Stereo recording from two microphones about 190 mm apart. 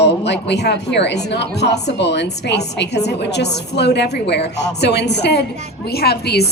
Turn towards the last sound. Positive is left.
turn(degrees=60)  # may be behind; listen again after turning